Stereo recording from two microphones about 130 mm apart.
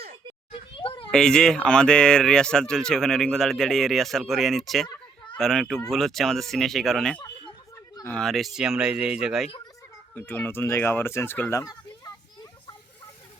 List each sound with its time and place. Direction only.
0.8 s children playing: 40° left (ahead or behind)
1.1 s speech: 5° left (ahead or behind)
10.2 s speech: 15° left (ahead or behind)
11.6 s a sound: 30° left (ahead or behind)